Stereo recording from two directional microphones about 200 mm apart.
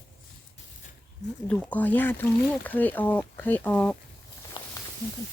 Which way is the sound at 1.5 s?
10° left (ahead or behind).